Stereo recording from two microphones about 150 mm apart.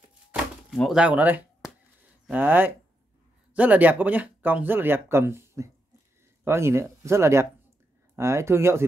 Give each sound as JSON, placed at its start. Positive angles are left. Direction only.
{"t": 0.7, "sound": "speech", "side_deg": -5}